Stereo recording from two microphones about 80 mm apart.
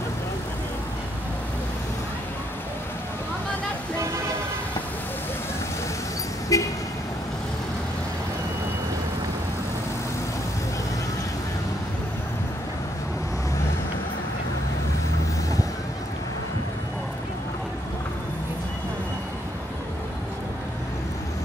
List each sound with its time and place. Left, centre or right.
6.5 s vehicle: left